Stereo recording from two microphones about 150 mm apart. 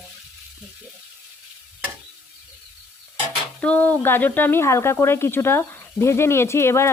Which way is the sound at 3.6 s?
10° left (ahead or behind).